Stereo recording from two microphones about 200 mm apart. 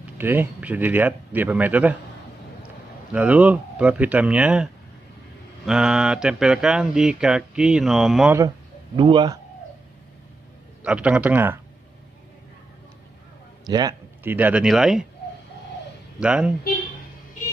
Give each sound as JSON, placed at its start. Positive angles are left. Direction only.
{"t": 0.0, "sound": "speech", "side_deg": -10}
{"t": 3.1, "sound": "speech", "side_deg": -5}
{"t": 5.7, "sound": "speech", "side_deg": -5}
{"t": 8.9, "sound": "a man's voice", "side_deg": -25}
{"t": 10.8, "sound": "speech", "side_deg": -5}
{"t": 13.7, "sound": "a man's voice", "side_deg": -20}
{"t": 14.3, "sound": "speech", "side_deg": -5}
{"t": 16.2, "sound": "speech", "side_deg": -5}